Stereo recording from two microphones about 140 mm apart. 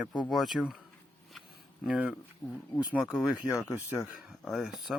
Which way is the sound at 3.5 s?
20° left (ahead or behind).